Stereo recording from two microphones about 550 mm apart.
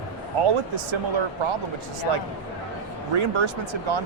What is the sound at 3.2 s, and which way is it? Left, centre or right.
Speech, right.